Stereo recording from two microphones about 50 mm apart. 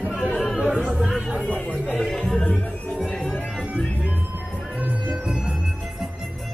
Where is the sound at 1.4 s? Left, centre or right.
Left.